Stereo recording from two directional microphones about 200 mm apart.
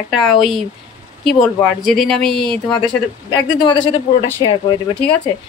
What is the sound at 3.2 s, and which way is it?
A woman's voice, 20° left (ahead or behind).